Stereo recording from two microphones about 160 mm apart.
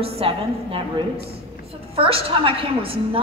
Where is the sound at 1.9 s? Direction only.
35° right (ahead or behind).